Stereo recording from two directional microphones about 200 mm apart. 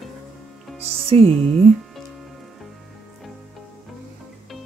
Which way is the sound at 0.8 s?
30° right (ahead or behind).